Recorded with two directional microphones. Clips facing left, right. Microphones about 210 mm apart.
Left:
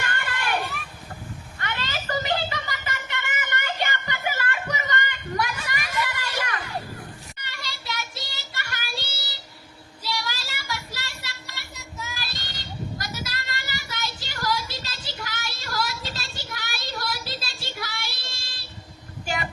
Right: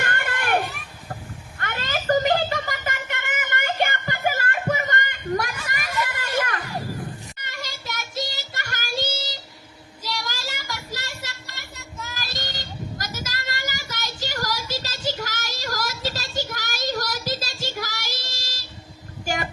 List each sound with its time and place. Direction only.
0.0 s children playing: 55° right (ahead or behind)
1.6 s a sound: 45° right (ahead or behind)
7.4 s child singing: 45° right (ahead or behind)
10.0 s a sound: 45° right (ahead or behind)
11.8 s child singing: centre (ahead or behind)
12.1 s child singing: 45° right (ahead or behind)